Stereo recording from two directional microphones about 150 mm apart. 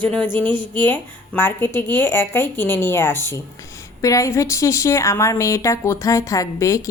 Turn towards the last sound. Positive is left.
turn(degrees=20)  # may be behind; listen again after turning